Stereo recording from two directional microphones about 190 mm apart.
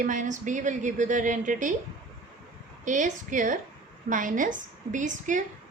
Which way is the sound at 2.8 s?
40° right (ahead or behind).